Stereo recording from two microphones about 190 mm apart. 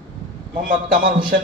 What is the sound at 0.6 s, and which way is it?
Speech, 45° right (ahead or behind).